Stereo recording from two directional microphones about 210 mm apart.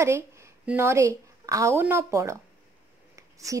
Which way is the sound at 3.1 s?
15° right (ahead or behind).